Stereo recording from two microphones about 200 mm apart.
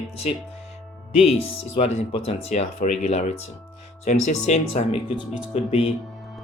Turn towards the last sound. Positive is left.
turn(degrees=30)  # may be behind; listen again after turning